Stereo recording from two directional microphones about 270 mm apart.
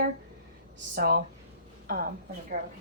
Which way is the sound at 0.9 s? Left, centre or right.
Right.